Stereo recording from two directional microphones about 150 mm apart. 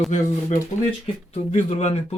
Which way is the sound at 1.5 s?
50° left (ahead or behind).